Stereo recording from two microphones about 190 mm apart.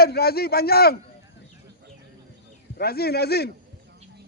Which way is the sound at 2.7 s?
55° left (ahead or behind).